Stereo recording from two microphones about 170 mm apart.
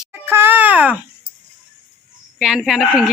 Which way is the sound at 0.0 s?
10° right (ahead or behind).